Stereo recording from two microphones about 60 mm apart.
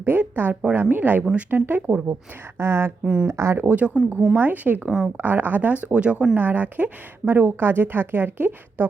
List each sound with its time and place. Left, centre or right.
0.0 s a woman's voice: right
3.0 s speech: centre
3.2 s speech: right
3.6 s speech: right
6.3 s a woman's voice: right